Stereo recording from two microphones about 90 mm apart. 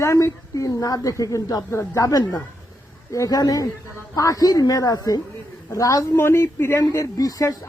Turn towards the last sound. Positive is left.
turn(degrees=40)  # may be behind; listen again after turning